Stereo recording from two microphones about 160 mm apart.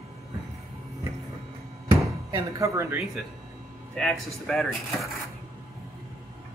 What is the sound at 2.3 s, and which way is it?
Speech, 20° right (ahead or behind).